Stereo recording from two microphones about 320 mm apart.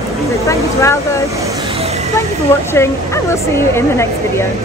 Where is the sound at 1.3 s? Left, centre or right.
Centre.